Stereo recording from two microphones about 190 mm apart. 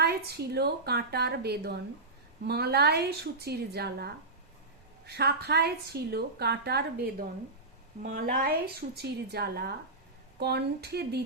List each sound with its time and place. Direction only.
0.0 s a woman's voice: 60° right (ahead or behind)
8.1 s a woman's voice: 45° right (ahead or behind)